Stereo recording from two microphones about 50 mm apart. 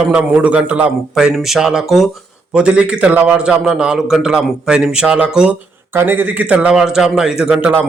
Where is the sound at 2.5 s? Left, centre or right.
Right.